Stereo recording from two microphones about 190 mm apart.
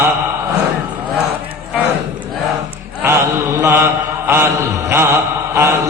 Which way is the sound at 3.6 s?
15° right (ahead or behind).